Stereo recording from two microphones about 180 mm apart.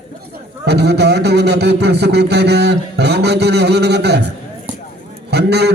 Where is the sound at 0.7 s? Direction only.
65° right (ahead or behind).